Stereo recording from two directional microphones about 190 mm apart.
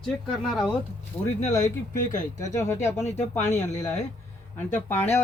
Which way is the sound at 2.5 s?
15° left (ahead or behind).